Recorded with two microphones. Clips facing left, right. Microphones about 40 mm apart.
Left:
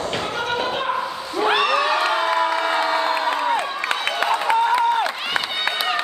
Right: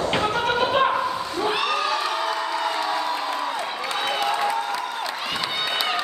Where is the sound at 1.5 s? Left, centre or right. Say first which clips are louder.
Left 7 dB; left.